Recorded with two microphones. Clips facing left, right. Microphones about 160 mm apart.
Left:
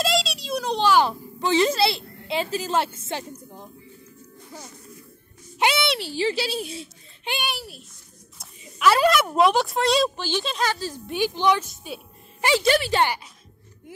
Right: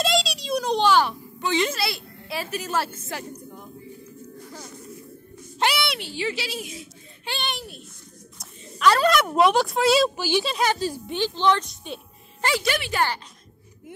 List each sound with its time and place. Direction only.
0.0 s a sound: centre (ahead or behind)
1.0 s a woman's voice: 35° left (ahead or behind)
5.6 s a woman's voice: 20° left (ahead or behind)
5.9 s a woman's voice: 35° left (ahead or behind)
7.2 s a child's voice: 10° left (ahead or behind); by 10.6 s 5° right (ahead or behind)
10.6 s speech: 15° right (ahead or behind)
11.1 s a woman's voice: 10° left (ahead or behind)
12.4 s a woman's voice: 30° left (ahead or behind)